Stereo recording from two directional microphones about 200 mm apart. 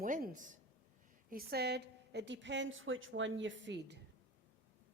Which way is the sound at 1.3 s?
50° right (ahead or behind).